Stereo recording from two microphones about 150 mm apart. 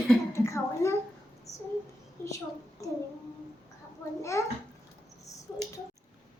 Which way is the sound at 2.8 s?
20° left (ahead or behind).